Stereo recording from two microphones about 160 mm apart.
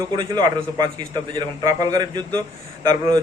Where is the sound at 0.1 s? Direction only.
25° right (ahead or behind).